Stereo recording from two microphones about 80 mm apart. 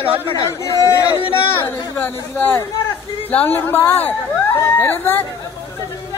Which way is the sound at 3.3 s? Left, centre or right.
Left.